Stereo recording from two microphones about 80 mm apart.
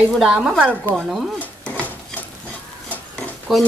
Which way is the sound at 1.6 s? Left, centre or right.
Centre.